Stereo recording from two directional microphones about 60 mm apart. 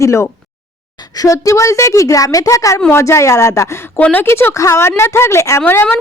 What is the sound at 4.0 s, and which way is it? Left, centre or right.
Speech, left.